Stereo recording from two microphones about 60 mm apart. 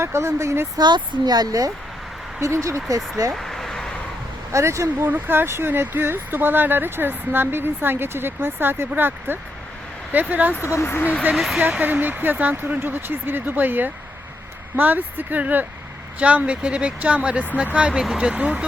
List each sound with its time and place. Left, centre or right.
0.0 s speech: right
2.4 s speech: right
2.9 s speech: right
3.3 s a sound: centre
4.5 s speech: right
5.0 s speech: right
10.5 s speech: left
11.3 s speech: centre
11.6 s speech: right
18.0 s speech: centre